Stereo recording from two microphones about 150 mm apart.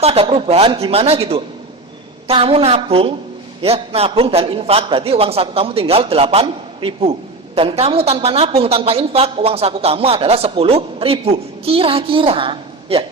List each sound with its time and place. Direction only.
0.0 s a man's voice: 40° right (ahead or behind)